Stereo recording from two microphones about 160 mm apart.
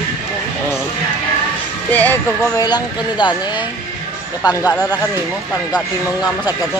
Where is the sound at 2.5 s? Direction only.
25° left (ahead or behind).